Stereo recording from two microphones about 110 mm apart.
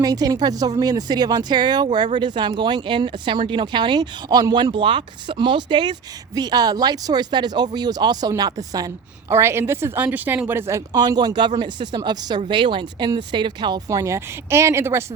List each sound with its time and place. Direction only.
0.0 s speech: 35° right (ahead or behind)
9.3 s speech: 25° right (ahead or behind)